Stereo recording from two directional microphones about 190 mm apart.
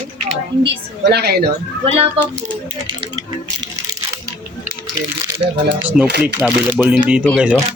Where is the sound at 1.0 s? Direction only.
60° right (ahead or behind).